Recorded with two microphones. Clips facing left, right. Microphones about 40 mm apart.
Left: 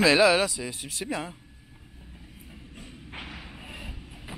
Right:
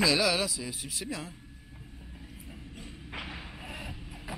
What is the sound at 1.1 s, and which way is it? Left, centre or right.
Speech, centre.